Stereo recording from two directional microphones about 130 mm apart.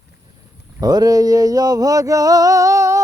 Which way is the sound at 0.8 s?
30° right (ahead or behind).